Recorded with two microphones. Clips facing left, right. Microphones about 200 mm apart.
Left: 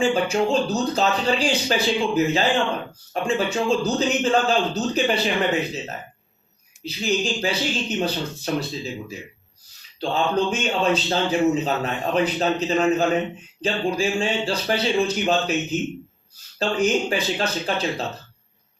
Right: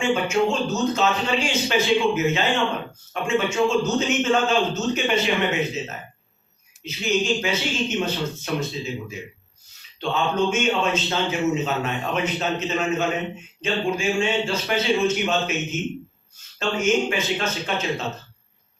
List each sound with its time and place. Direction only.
0.0 s a man's voice: 35° left (ahead or behind)
6.8 s a man's voice: 35° left (ahead or behind)